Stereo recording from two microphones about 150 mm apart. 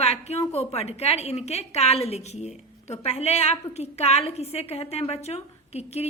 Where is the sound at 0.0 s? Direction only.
45° left (ahead or behind).